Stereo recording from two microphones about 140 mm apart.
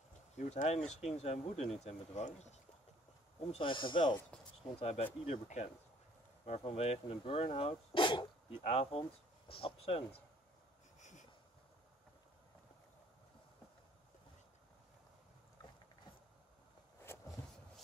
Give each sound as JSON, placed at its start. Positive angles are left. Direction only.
{"t": 0.4, "sound": "speech", "side_deg": 55}
{"t": 3.5, "sound": "speech", "side_deg": 35}
{"t": 4.7, "sound": "speech", "side_deg": 45}
{"t": 8.6, "sound": "speech", "side_deg": 45}
{"t": 11.0, "sound": "a sound", "side_deg": 60}